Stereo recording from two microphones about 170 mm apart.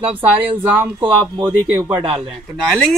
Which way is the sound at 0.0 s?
30° right (ahead or behind).